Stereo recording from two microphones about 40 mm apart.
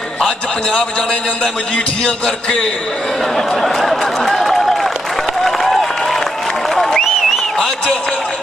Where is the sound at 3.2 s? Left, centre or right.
Centre.